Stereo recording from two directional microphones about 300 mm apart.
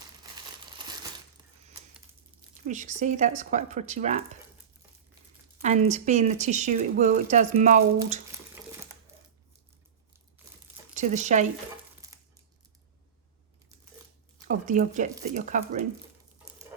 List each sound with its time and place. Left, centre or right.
2.6 s speech: right
5.6 s speech: right
10.9 s speech: right
14.4 s speech: right